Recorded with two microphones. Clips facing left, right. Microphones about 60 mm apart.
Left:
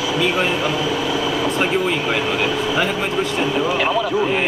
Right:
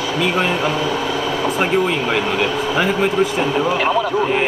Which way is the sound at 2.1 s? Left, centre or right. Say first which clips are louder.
Right 2 dB; centre.